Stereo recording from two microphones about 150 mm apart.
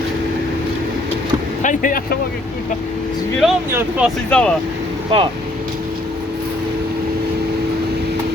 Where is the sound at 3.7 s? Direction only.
15° right (ahead or behind).